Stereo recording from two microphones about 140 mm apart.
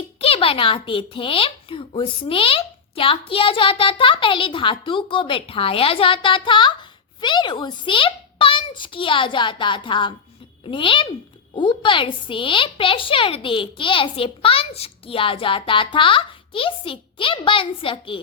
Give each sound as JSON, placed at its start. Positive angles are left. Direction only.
{"t": 0.2, "sound": "a woman's voice", "side_deg": 40}